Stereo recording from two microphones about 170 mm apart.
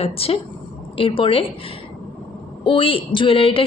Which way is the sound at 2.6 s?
30° left (ahead or behind).